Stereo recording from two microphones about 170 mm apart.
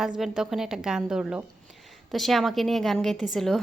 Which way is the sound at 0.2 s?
Centre (ahead or behind).